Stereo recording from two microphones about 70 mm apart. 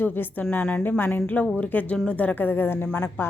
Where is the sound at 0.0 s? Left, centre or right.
Left.